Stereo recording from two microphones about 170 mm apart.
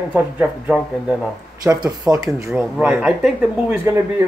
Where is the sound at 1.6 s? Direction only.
20° right (ahead or behind).